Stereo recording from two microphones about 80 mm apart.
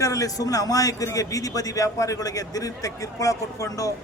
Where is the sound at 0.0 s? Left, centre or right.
Left.